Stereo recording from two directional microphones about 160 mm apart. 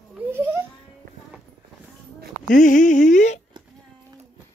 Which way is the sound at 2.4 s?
55° left (ahead or behind).